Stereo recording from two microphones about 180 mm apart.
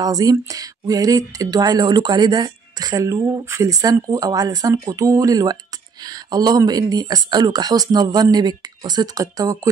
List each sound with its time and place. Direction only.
0.0 s speech: 20° right (ahead or behind)